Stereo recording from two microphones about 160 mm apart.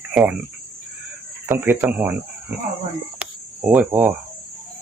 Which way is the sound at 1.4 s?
15° right (ahead or behind).